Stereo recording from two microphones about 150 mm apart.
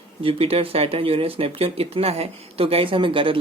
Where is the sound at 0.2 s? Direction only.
40° right (ahead or behind).